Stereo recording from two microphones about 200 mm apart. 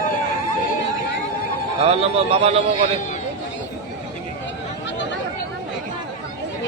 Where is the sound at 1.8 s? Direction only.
30° right (ahead or behind).